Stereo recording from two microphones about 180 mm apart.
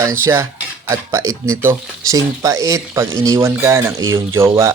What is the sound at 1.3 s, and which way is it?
Speech, 15° right (ahead or behind).